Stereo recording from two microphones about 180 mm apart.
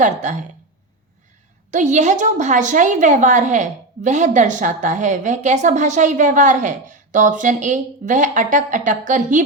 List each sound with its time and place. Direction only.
0.0 s speech: 40° right (ahead or behind)
1.7 s a woman's voice: 40° right (ahead or behind)